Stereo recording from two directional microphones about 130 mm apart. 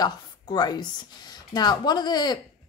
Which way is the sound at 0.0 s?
30° left (ahead or behind).